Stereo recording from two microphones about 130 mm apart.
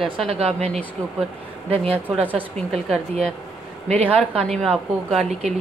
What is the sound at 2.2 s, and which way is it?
Speech, 15° right (ahead or behind).